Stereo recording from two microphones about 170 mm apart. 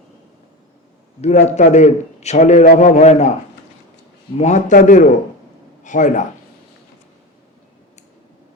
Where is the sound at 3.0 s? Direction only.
45° left (ahead or behind).